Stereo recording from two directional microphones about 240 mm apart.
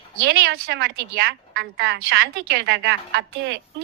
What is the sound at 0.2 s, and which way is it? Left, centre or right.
A woman's voice, right.